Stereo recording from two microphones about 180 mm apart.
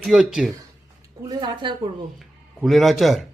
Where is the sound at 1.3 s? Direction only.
25° right (ahead or behind).